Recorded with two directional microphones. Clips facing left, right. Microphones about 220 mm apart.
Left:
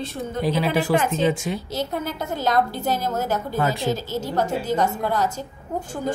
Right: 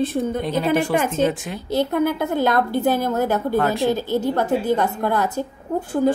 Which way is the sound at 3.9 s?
60° right (ahead or behind).